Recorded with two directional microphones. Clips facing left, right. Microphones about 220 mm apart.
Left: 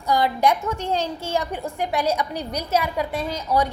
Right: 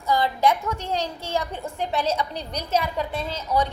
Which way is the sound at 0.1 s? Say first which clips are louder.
Left 1 dB; 15° left (ahead or behind).